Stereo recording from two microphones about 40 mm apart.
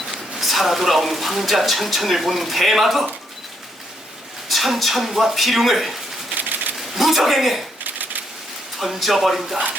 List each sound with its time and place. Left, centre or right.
0.1 s speech: centre
4.4 s speech: centre
6.3 s a sound: right
6.7 s a man's voice: centre
7.9 s a sound: right
8.8 s speech: centre